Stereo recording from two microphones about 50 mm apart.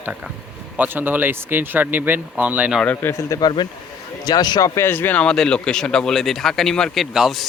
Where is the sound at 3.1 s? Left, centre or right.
Left.